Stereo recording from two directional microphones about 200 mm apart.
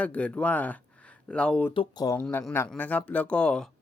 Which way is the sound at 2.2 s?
5° left (ahead or behind).